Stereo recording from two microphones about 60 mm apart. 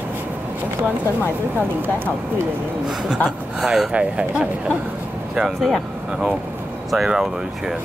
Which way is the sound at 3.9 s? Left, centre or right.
Centre.